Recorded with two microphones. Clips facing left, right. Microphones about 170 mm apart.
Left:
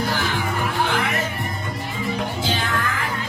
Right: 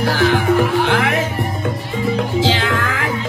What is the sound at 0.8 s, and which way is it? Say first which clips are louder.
Speech: right 6 dB; 85° right.